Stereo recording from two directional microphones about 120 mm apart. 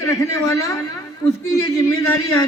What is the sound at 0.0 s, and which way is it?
A man's voice, 25° left (ahead or behind).